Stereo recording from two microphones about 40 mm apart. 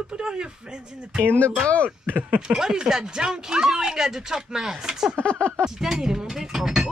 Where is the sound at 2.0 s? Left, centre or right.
Right.